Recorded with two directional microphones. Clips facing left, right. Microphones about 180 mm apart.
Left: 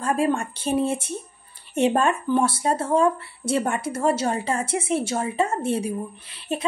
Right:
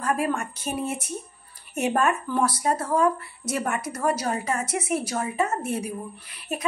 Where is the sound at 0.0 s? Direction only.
30° left (ahead or behind).